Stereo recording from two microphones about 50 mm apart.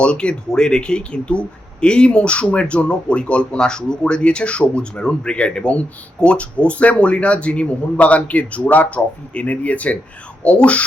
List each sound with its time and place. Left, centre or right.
0.0 s speech: centre